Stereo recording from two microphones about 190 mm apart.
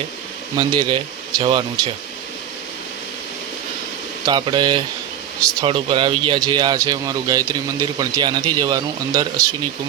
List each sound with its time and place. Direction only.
0.5 s a man's voice: 25° right (ahead or behind)
4.3 s a man's voice: 25° right (ahead or behind)